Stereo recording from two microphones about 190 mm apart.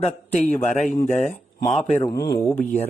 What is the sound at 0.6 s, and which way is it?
A man's voice, 5° left (ahead or behind).